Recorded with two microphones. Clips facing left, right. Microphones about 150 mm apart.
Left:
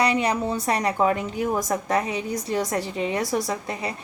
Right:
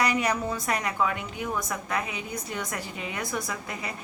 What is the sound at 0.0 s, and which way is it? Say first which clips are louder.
A woman's voice: left 4 dB; 30° left (ahead or behind).